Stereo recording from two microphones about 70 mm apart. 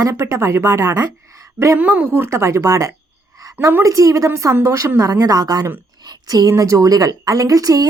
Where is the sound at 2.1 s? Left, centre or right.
Right.